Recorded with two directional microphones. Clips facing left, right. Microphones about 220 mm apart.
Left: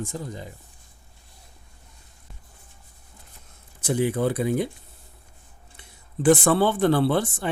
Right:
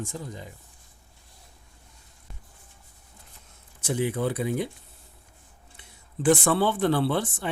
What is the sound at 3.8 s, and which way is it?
Speech, 40° left (ahead or behind).